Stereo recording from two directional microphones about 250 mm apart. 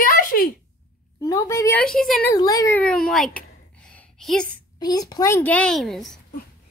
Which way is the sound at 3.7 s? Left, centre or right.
Centre.